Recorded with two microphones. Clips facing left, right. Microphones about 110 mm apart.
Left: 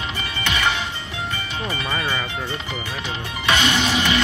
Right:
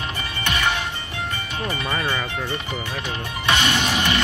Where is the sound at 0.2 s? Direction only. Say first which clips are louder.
Left 1 dB; 45° right (ahead or behind).